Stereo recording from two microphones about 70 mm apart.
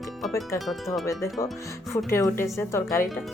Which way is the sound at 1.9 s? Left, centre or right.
Left.